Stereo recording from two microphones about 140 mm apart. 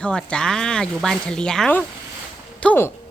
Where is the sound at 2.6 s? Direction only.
15° left (ahead or behind).